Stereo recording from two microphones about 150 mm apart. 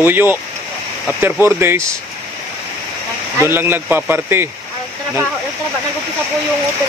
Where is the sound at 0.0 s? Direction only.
15° right (ahead or behind).